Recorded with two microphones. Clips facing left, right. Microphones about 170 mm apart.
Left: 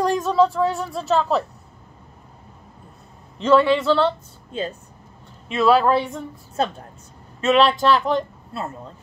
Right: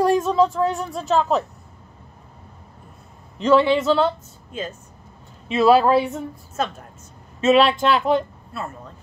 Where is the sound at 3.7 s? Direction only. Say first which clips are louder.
Even; centre (ahead or behind).